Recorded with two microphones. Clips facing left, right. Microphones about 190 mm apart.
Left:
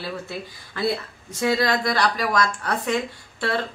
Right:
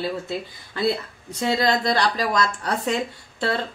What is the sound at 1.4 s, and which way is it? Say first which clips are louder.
A woman's voice: even; 25° right (ahead or behind).